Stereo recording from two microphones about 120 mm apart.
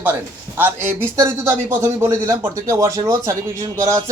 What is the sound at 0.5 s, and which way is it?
A man's voice, 20° right (ahead or behind).